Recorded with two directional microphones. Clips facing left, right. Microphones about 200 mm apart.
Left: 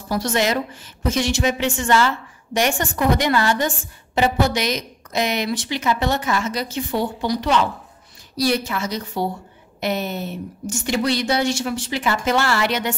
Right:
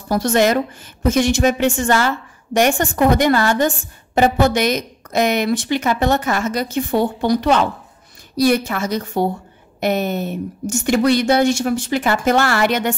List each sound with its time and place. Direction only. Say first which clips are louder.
0.1 s a woman's voice: right 5 dB; 50° right (ahead or behind)